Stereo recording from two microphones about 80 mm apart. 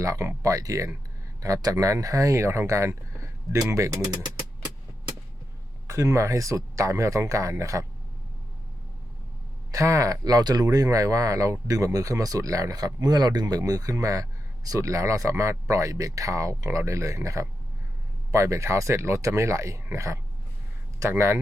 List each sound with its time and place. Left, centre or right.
0.0 s speech: right
5.9 s speech: right
9.7 s speech: right